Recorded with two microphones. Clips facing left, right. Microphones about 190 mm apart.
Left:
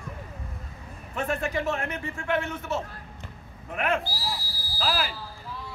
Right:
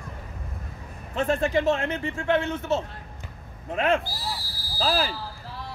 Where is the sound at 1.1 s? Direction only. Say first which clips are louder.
Right 5 dB; 30° right (ahead or behind).